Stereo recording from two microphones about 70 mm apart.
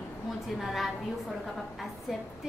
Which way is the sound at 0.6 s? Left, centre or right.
Centre.